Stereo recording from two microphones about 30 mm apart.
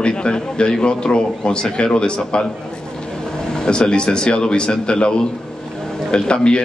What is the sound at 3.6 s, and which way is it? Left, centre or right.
A man's voice, left.